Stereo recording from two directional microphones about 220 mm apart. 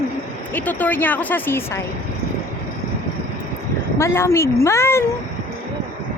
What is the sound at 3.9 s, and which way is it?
Speech, 10° left (ahead or behind).